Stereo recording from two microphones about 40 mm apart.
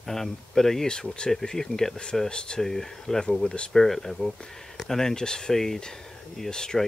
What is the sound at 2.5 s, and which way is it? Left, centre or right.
Speech, centre.